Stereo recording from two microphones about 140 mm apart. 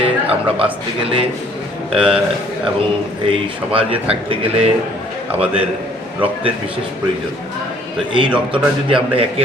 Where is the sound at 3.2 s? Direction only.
40° right (ahead or behind).